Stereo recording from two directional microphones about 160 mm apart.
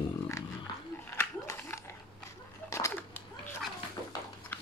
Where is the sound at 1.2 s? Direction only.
15° left (ahead or behind).